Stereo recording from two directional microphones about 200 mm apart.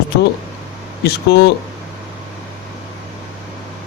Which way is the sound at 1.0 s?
55° left (ahead or behind).